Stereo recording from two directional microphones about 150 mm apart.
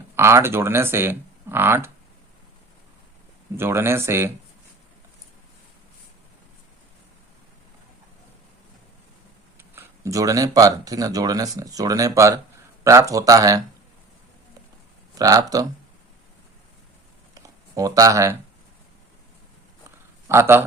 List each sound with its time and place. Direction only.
0.2 s speech: 15° right (ahead or behind)
3.6 s speech: 15° right (ahead or behind)
9.6 s speech: 15° right (ahead or behind)
15.1 s speech: 25° right (ahead or behind)
17.3 s a sound: 25° right (ahead or behind)
20.2 s speech: 15° right (ahead or behind)